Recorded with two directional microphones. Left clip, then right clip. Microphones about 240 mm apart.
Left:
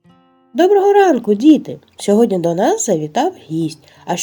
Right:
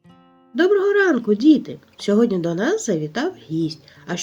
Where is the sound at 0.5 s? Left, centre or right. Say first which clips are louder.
Left 6 dB; centre.